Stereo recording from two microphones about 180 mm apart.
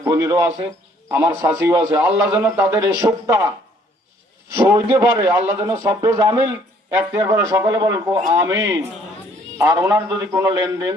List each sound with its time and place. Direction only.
0.0 s a man's voice: 20° right (ahead or behind)
4.5 s a man's voice: 15° right (ahead or behind)